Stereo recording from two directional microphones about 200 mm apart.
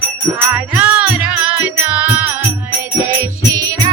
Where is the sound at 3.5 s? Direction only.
15° right (ahead or behind).